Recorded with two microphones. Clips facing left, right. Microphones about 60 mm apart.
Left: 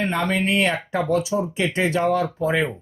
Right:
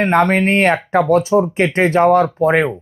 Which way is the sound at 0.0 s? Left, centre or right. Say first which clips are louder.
Right 9 dB; right.